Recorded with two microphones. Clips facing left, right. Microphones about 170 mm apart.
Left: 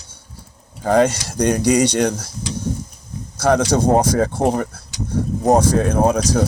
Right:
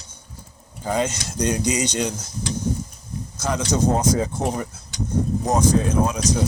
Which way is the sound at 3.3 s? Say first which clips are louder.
Left 7 dB; 65° left (ahead or behind).